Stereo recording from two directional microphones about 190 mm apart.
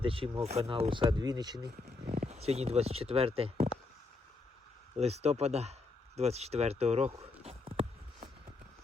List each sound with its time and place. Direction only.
0.0 s speech: 30° right (ahead or behind)
2.0 s speech: 35° right (ahead or behind)
4.9 s speech: 35° right (ahead or behind)
6.1 s a sound: 35° right (ahead or behind)